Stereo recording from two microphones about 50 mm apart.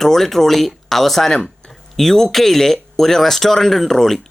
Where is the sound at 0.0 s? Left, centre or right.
Centre.